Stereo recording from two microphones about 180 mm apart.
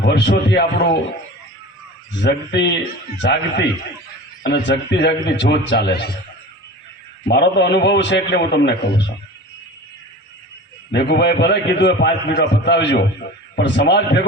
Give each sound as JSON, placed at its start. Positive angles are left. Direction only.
{"t": 0.0, "sound": "a man's voice", "side_deg": 70}
{"t": 2.2, "sound": "a man's voice", "side_deg": 70}
{"t": 7.3, "sound": "a man's voice", "side_deg": 65}
{"t": 10.9, "sound": "a man's voice", "side_deg": 70}